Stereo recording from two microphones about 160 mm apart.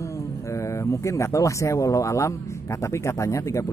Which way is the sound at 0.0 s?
20° left (ahead or behind).